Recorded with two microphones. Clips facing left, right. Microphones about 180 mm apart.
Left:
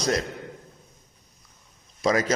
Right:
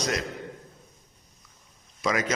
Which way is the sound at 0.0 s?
35° left (ahead or behind).